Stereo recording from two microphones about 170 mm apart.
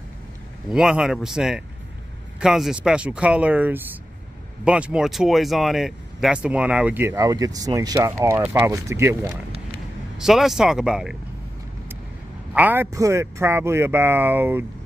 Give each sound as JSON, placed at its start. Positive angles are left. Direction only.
{"t": 0.7, "sound": "speech", "side_deg": -5}
{"t": 10.1, "sound": "speech", "side_deg": 0}
{"t": 12.5, "sound": "speech", "side_deg": -10}